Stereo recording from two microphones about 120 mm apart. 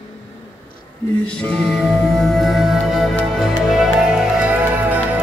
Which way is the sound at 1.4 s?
5° left (ahead or behind).